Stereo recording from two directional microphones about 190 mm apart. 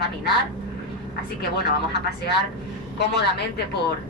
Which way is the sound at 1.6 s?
60° left (ahead or behind).